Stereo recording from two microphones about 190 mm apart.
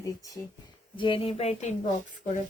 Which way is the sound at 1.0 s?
30° left (ahead or behind).